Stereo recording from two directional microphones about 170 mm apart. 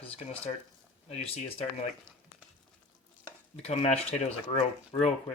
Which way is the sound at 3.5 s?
40° left (ahead or behind).